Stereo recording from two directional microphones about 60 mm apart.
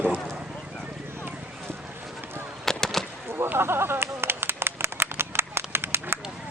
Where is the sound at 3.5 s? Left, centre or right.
Right.